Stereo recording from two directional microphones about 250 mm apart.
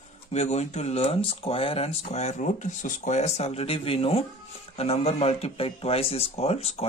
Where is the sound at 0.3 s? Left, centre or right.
Left.